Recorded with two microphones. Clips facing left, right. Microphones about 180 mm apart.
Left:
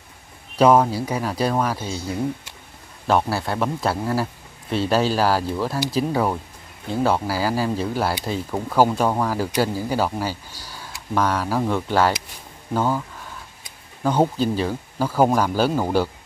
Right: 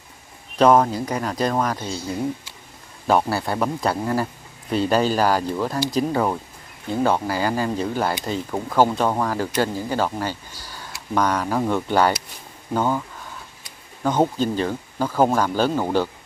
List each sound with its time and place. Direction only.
0.6 s speech: 10° left (ahead or behind)
3.1 s speech: centre (ahead or behind)
14.0 s speech: 10° left (ahead or behind)